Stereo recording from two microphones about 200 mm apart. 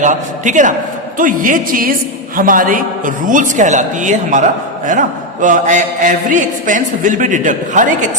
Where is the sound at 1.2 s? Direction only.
40° right (ahead or behind).